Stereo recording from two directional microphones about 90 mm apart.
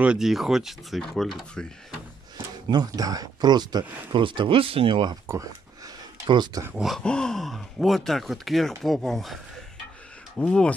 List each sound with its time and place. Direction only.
0.0 s speech: 10° right (ahead or behind)
2.3 s speech: 50° right (ahead or behind); by 5.1 s 75° right (ahead or behind)
6.2 s speech: 60° right (ahead or behind)
6.7 s speech: 5° right (ahead or behind)
7.0 s speech: 10° left (ahead or behind)